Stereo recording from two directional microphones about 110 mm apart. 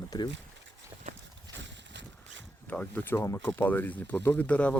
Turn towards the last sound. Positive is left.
turn(degrees=10)  # may be behind; listen again after turning